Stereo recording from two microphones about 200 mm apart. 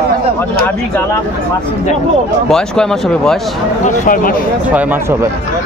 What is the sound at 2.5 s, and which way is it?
Speech, 5° left (ahead or behind).